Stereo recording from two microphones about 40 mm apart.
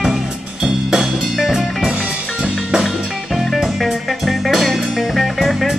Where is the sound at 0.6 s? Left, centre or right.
Centre.